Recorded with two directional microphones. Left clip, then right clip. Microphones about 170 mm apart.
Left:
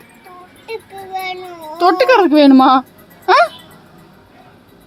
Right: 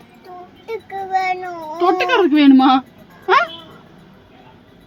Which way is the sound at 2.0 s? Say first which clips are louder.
Left 5 dB; 30° left (ahead or behind).